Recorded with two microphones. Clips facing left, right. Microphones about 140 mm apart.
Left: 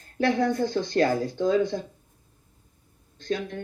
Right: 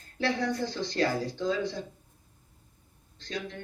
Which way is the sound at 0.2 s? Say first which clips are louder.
Left 6 dB; 50° left (ahead or behind).